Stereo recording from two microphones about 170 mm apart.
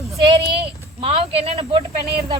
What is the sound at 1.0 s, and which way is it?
Speech, 35° right (ahead or behind).